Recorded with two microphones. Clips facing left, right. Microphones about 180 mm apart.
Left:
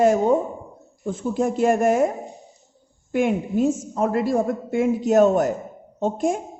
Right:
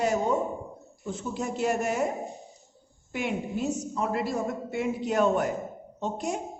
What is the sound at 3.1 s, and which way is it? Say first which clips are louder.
A woman's voice: left 9 dB; 50° left (ahead or behind).